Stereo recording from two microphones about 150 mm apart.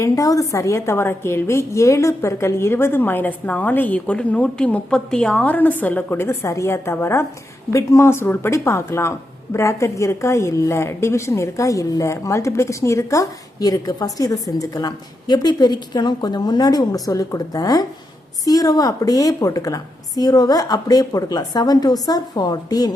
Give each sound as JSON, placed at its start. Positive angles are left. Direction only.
{"t": 0.0, "sound": "a woman's voice", "side_deg": 20}